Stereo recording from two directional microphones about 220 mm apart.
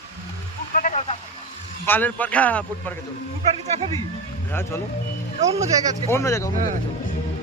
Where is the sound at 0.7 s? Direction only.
35° left (ahead or behind).